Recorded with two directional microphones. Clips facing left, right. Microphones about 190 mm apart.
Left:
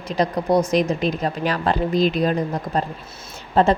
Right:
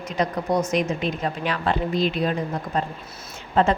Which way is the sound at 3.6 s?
35° left (ahead or behind).